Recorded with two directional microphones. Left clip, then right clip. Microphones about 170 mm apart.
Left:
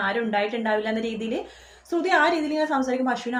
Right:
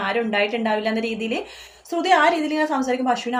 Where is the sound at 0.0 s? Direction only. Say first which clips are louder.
Right 3 dB; 20° right (ahead or behind).